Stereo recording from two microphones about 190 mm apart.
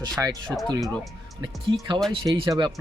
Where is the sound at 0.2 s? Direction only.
20° right (ahead or behind).